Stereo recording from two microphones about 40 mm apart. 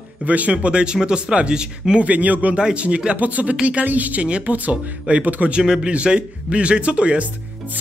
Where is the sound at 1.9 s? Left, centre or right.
Right.